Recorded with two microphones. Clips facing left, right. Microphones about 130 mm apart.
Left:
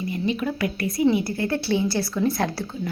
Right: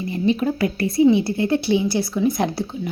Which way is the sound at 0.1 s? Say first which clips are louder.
Right 7 dB; 35° right (ahead or behind).